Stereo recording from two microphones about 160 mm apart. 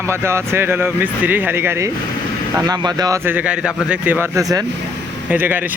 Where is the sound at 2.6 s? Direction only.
25° right (ahead or behind).